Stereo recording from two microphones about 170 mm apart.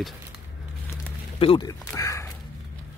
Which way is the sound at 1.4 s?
30° left (ahead or behind).